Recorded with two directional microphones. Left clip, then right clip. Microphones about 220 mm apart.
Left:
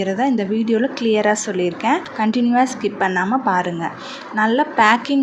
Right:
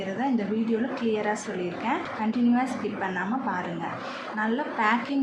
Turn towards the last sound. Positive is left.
turn(degrees=40)  # may be behind; listen again after turning